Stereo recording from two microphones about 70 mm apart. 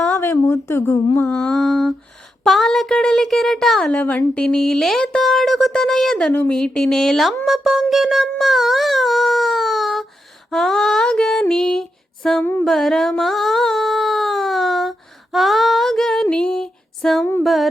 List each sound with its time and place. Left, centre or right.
0.2 s a woman's voice: left
1.3 s speech: centre
3.9 s a woman's voice: left
4.4 s speech: centre
6.5 s female singing: centre
7.4 s a sound: centre
10.5 s female singing: centre
12.6 s a sound: centre
16.2 s female singing: centre
17.4 s speech: centre